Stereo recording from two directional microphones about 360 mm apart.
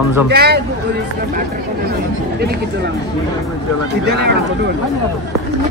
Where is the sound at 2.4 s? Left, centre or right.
Right.